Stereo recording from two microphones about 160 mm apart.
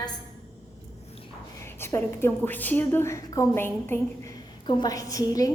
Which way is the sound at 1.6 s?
15° left (ahead or behind).